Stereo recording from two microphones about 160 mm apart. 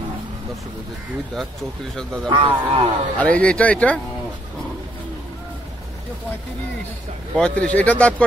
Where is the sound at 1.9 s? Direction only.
5° left (ahead or behind).